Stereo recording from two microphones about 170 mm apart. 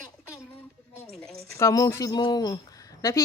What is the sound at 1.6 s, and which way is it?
Speech, 15° left (ahead or behind).